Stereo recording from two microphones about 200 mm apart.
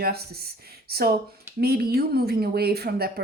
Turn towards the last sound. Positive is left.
turn(degrees=-50)  # may be behind; listen again after turning